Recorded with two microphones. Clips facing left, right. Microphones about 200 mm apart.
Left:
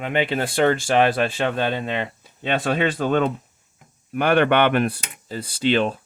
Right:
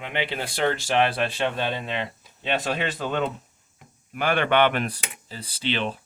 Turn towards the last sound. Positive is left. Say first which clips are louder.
# left 8 dB
turn(degrees=45)  # may be behind; listen again after turning